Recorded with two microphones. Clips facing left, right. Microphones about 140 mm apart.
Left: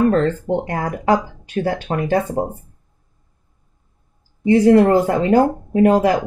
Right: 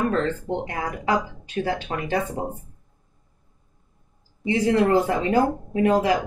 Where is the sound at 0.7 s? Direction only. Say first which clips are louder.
Left 7 dB; 45° left (ahead or behind).